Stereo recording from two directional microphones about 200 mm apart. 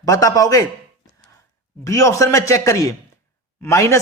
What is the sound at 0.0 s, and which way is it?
Speech, 15° left (ahead or behind).